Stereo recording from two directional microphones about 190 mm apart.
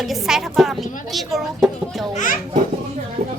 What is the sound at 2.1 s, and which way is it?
Speech, 45° left (ahead or behind).